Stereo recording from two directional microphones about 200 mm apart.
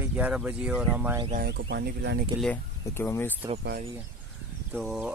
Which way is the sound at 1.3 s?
55° right (ahead or behind).